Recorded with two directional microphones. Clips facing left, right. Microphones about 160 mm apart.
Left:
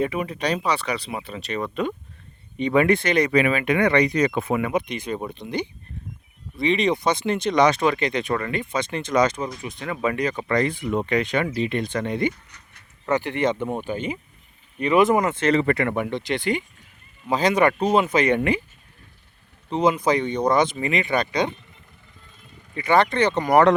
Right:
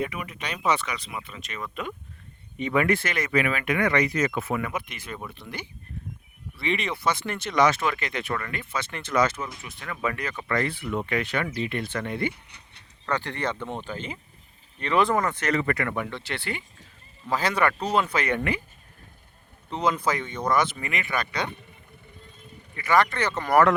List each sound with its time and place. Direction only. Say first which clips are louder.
0.0 s speech: left 7 dB; 30° left (ahead or behind)
2.6 s speech: left 5 dB; 25° left (ahead or behind)
19.7 s speech: left 6 dB; 20° left (ahead or behind)
22.7 s speech: left 3 dB; 25° left (ahead or behind)